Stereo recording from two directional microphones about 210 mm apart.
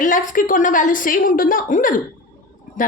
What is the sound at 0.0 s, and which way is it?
A woman's voice, 40° left (ahead or behind).